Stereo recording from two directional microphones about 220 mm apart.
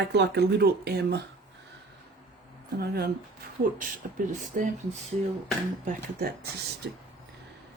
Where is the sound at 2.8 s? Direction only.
45° right (ahead or behind).